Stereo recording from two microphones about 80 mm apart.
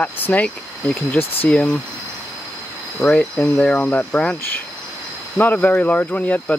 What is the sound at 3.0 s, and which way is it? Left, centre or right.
Speech, centre.